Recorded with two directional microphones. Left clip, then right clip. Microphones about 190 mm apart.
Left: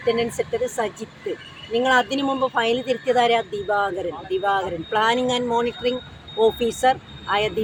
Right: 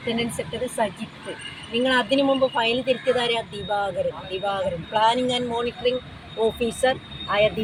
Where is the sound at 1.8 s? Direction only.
30° left (ahead or behind).